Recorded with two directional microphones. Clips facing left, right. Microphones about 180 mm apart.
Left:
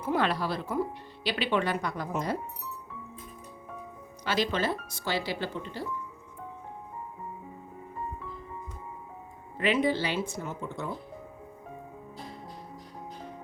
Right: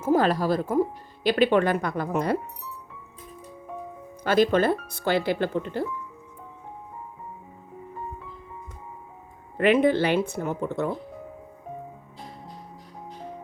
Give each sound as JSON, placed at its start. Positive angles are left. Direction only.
{"t": 0.0, "sound": "speech", "side_deg": -45}
{"t": 4.2, "sound": "speech", "side_deg": -50}
{"t": 9.6, "sound": "speech", "side_deg": -55}